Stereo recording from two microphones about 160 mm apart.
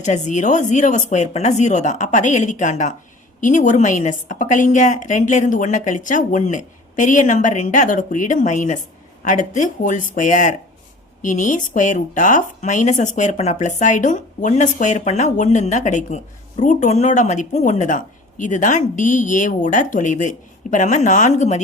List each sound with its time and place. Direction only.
0.0 s a woman's voice: 50° left (ahead or behind)